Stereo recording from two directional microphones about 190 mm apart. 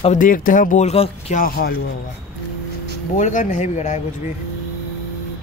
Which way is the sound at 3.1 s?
40° left (ahead or behind).